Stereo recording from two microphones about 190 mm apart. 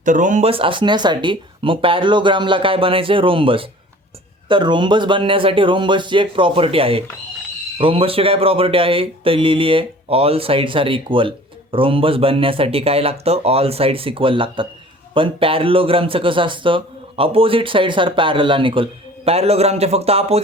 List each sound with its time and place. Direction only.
0.0 s speech: 40° right (ahead or behind)